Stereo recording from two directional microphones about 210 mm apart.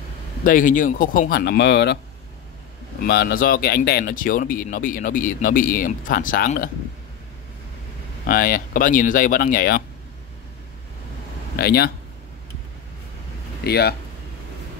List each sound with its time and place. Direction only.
0.4 s speech: 40° left (ahead or behind)
3.0 s speech: 45° left (ahead or behind)
8.3 s speech: 40° left (ahead or behind)
11.5 s speech: 50° left (ahead or behind)
13.7 s speech: 50° left (ahead or behind)